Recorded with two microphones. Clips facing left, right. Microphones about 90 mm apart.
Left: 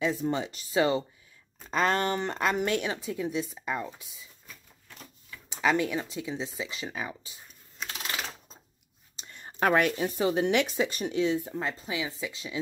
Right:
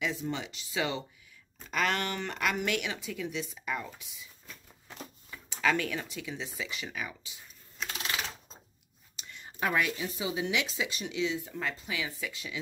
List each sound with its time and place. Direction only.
0.1 s speech: 40° left (ahead or behind); by 4.1 s 25° left (ahead or behind)
5.5 s speech: 20° left (ahead or behind)
9.6 s speech: 55° left (ahead or behind)
11.6 s speech: 30° left (ahead or behind)